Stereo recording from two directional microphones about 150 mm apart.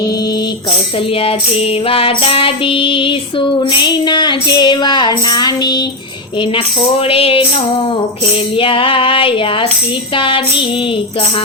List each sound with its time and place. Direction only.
1.9 s female singing: 40° left (ahead or behind)
7.0 s female singing: 40° left (ahead or behind)
8.5 s female singing: 35° left (ahead or behind)